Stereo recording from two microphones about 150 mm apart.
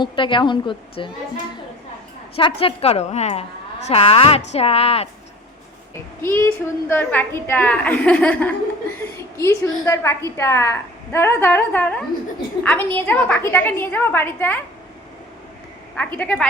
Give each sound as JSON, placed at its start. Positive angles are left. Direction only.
{"t": 0.0, "sound": "speech", "side_deg": 35}
{"t": 2.3, "sound": "speech", "side_deg": 40}
{"t": 6.2, "sound": "a woman's voice", "side_deg": 15}
{"t": 16.0, "sound": "a woman's voice", "side_deg": 10}